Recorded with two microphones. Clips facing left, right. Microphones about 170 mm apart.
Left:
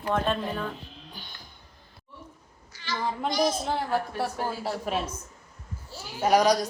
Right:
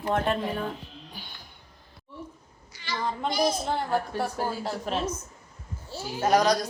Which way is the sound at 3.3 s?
10° right (ahead or behind).